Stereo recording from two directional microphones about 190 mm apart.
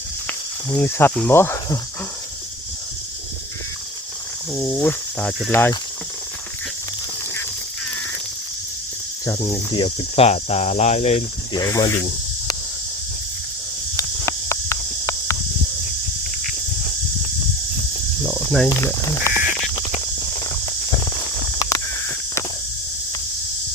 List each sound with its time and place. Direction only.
0.3 s speech: 10° left (ahead or behind)
4.5 s speech: 5° left (ahead or behind)
9.2 s speech: 15° left (ahead or behind)
9.8 s speech: 30° left (ahead or behind)
11.5 s speech: 20° left (ahead or behind)
13.9 s walk: 15° left (ahead or behind)
18.3 s cricket: 5° left (ahead or behind)
18.8 s speech: 15° left (ahead or behind)
19.3 s crow: 45° left (ahead or behind)
20.4 s walk: 20° left (ahead or behind)